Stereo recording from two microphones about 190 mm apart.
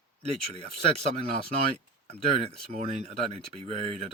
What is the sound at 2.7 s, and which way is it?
Speech, 35° right (ahead or behind).